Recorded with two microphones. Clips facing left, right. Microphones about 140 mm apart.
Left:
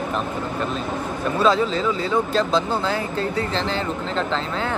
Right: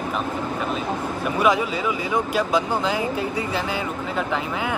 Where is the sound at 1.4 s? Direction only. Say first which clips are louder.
Left 2 dB; 15° right (ahead or behind).